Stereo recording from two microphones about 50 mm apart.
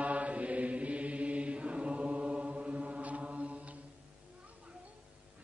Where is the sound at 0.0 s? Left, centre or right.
Right.